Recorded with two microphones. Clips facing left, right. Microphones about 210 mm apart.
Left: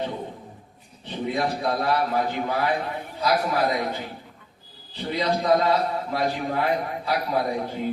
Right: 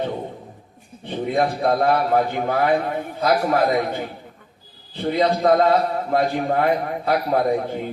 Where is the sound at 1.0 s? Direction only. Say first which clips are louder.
Right 5 dB; 55° right (ahead or behind).